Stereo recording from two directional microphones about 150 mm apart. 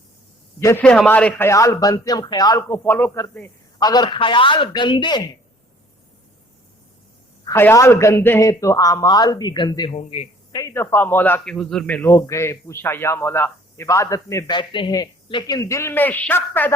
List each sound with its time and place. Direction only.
0.6 s a man's voice: 15° left (ahead or behind)
3.8 s speech: 25° left (ahead or behind)
7.5 s a man's voice: 15° left (ahead or behind)
12.0 s a man's voice: 20° left (ahead or behind)